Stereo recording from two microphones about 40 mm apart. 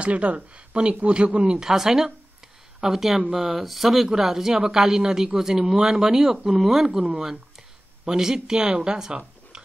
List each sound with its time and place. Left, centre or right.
0.0 s speech: right; by 6.9 s centre
8.0 s speech: centre